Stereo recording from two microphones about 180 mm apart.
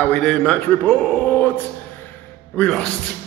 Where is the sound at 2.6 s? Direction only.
5° left (ahead or behind).